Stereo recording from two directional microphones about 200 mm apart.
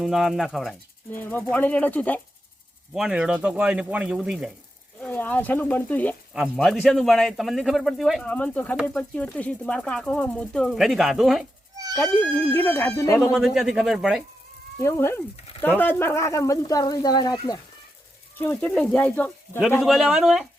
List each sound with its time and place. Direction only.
0.0 s speech: centre (ahead or behind)
2.9 s speech: 5° right (ahead or behind)
11.9 s speech: 10° left (ahead or behind)
13.1 s speech: centre (ahead or behind)
14.8 s speech: 15° left (ahead or behind)
18.3 s speech: 10° left (ahead or behind)